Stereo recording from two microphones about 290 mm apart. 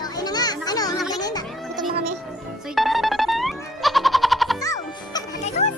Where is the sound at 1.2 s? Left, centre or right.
Centre.